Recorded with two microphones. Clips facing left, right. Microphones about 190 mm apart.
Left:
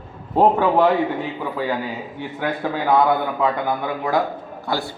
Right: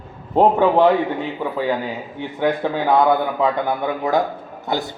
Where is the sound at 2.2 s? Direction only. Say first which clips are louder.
Right 6 dB; 20° right (ahead or behind).